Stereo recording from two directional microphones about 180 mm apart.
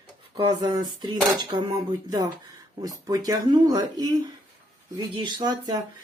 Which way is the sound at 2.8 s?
20° right (ahead or behind).